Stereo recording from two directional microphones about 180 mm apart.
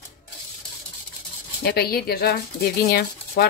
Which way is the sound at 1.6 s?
60° left (ahead or behind).